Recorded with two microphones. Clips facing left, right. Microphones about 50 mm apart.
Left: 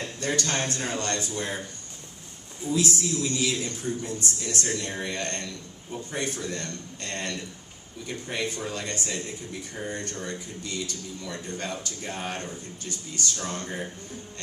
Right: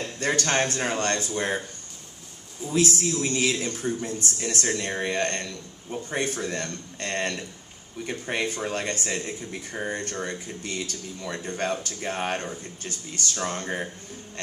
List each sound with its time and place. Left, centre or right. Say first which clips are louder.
0.0 s a man's voice: right 3 dB; right
2.6 s speech: right 2 dB; right